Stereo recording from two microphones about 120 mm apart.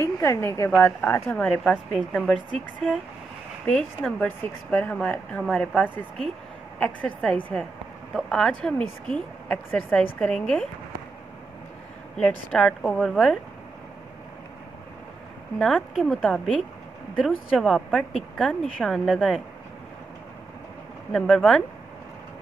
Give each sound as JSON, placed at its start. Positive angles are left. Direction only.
{"t": 0.0, "sound": "a woman's voice", "side_deg": 20}
{"t": 12.2, "sound": "speech", "side_deg": 5}
{"t": 15.6, "sound": "a woman's voice", "side_deg": 0}
{"t": 21.1, "sound": "speech", "side_deg": 5}